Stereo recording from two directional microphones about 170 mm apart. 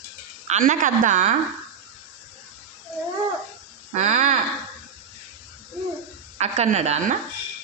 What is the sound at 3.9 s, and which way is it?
Speech, 45° right (ahead or behind).